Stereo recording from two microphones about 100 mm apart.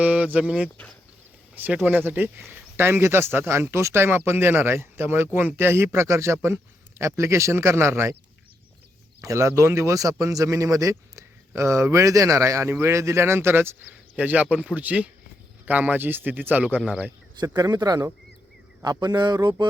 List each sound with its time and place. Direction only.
0.0 s speech: 15° right (ahead or behind)
9.2 s speech: 30° right (ahead or behind); by 17.1 s 10° right (ahead or behind)
17.4 s speech: 40° right (ahead or behind)